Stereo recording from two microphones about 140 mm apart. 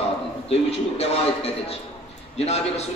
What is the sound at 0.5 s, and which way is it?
A man's voice, 45° left (ahead or behind).